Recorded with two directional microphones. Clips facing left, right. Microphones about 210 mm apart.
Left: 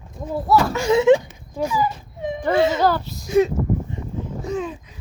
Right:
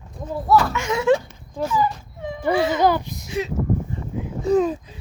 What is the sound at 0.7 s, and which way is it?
Speech, 30° left (ahead or behind).